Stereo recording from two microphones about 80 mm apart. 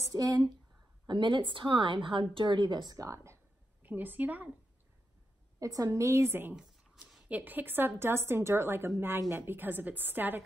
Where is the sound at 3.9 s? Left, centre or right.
Right.